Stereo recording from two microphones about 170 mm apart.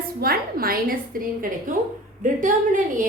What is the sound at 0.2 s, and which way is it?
Speech, 60° right (ahead or behind).